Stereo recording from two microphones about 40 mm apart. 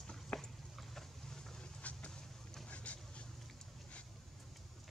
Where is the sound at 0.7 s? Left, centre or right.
Centre.